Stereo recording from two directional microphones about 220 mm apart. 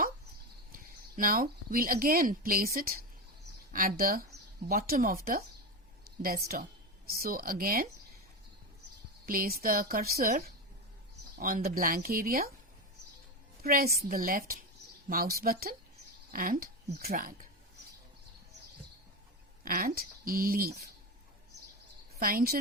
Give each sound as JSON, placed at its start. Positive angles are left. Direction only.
{"t": 0.7, "sound": "speech", "side_deg": -40}
{"t": 9.2, "sound": "speech", "side_deg": -40}
{"t": 13.6, "sound": "speech", "side_deg": -45}
{"t": 19.6, "sound": "speech", "side_deg": -40}
{"t": 22.2, "sound": "speech", "side_deg": -40}